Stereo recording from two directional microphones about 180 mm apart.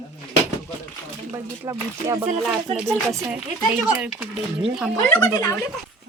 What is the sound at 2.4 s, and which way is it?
Speech, 5° right (ahead or behind).